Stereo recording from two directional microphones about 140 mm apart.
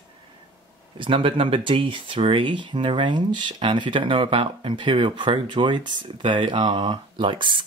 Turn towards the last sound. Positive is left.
turn(degrees=-35)  # may be behind; listen again after turning